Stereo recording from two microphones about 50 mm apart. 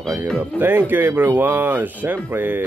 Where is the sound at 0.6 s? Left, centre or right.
Right.